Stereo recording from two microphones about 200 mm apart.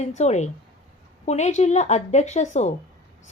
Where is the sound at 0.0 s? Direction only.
35° left (ahead or behind).